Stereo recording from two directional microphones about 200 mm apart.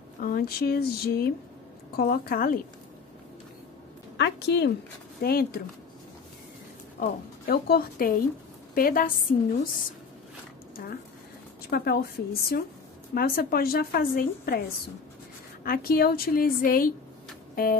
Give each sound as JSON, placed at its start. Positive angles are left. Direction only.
{"t": 0.2, "sound": "a woman's voice", "side_deg": 45}
{"t": 4.2, "sound": "a woman's voice", "side_deg": 55}
{"t": 7.0, "sound": "a woman's voice", "side_deg": 50}
{"t": 10.8, "sound": "a woman's voice", "side_deg": 50}
{"t": 15.6, "sound": "a woman's voice", "side_deg": 45}